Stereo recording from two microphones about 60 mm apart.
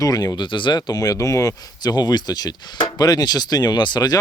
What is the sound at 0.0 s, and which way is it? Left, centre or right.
Speech, left.